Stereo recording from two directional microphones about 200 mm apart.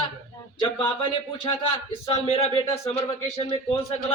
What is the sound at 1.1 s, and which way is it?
A man's voice, 25° left (ahead or behind).